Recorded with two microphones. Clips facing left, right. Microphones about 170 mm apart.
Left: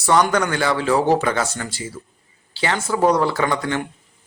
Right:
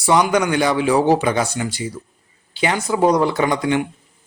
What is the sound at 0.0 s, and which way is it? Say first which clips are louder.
A man's voice: right 1 dB; 10° right (ahead or behind).